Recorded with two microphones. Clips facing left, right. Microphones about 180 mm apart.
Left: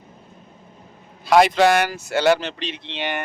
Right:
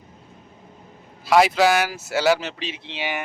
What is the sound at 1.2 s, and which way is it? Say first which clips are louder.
Speech: left 2 dB; 5° right (ahead or behind).